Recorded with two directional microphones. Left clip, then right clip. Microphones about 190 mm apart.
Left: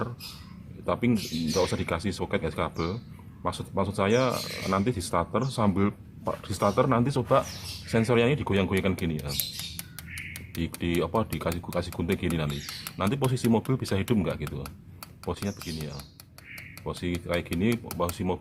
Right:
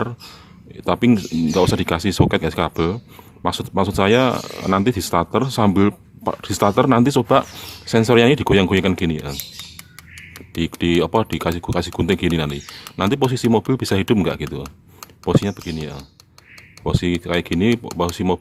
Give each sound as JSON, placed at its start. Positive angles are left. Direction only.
{"t": 0.9, "sound": "speech", "side_deg": -50}
{"t": 10.5, "sound": "speech", "side_deg": -50}